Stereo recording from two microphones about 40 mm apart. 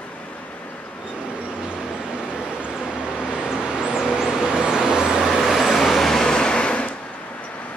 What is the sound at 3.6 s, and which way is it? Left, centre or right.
Vehicle, right.